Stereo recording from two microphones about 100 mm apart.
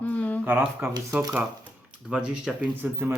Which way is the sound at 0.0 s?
15° left (ahead or behind).